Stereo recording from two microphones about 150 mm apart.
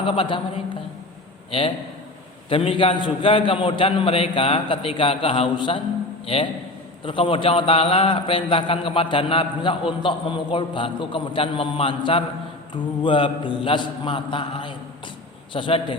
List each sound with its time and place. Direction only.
0.0 s a man's voice: 35° left (ahead or behind)